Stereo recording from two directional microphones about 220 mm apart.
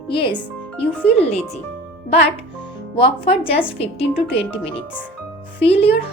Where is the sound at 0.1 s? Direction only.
25° left (ahead or behind).